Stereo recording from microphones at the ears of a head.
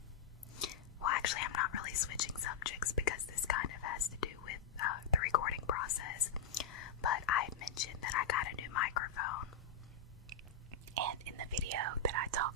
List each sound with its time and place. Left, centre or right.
0.6 s whispering: left
10.3 s whispering: right